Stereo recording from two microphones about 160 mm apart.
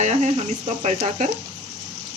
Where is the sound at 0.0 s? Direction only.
45° right (ahead or behind).